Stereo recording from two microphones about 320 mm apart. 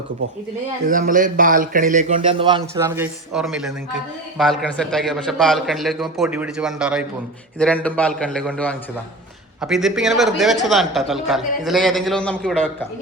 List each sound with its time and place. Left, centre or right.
0.9 s a man's voice: right; by 12.7 s centre